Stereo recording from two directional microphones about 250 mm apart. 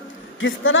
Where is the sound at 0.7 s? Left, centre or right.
Left.